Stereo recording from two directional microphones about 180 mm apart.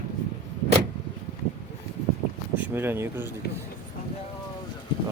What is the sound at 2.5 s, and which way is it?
Speech, 10° right (ahead or behind).